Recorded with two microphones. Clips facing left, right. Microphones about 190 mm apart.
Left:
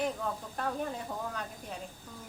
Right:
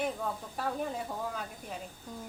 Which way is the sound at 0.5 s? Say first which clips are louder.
Right 1 dB; 5° right (ahead or behind).